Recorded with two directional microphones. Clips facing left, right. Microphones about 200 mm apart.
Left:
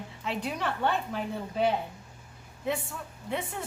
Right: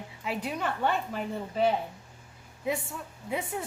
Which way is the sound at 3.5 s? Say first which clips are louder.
Right 3 dB; 5° right (ahead or behind).